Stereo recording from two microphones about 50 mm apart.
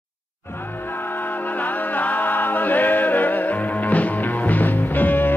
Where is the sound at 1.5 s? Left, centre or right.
Left.